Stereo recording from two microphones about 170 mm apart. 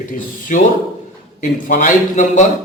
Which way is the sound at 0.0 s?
50° left (ahead or behind).